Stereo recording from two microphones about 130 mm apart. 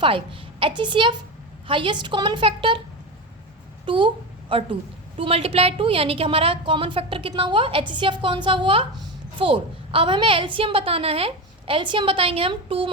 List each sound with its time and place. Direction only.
0.0 s a woman's voice: 40° right (ahead or behind)
3.8 s a woman's voice: 40° right (ahead or behind)